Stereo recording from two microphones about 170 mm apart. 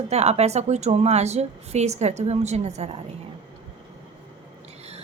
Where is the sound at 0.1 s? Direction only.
40° right (ahead or behind).